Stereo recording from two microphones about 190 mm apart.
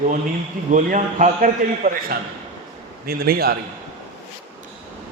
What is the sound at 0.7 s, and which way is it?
A man's voice, 40° right (ahead or behind).